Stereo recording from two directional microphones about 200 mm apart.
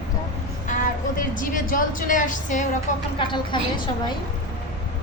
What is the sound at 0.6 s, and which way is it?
A woman's voice, 40° left (ahead or behind).